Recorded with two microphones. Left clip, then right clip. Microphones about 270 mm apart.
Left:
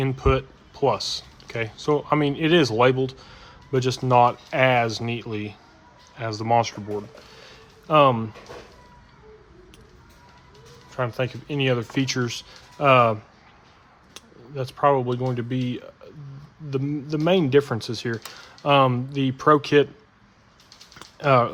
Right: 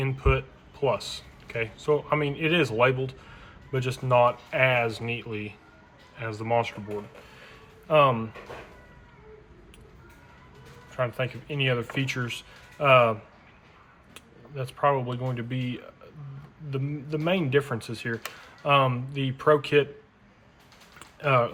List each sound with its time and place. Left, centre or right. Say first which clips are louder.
0.0 s speech: left 4 dB; left
7.3 s a sound: left 2 dB; left
10.9 s speech: left 2 dB; left
21.2 s speech: left 5 dB; left